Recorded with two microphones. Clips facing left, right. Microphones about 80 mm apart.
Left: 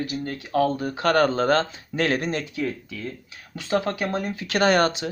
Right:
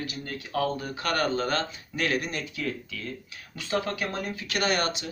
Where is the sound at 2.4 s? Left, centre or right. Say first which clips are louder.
Left 5 dB; left.